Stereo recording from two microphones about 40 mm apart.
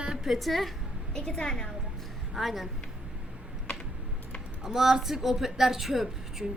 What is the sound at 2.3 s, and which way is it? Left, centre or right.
Speech, centre.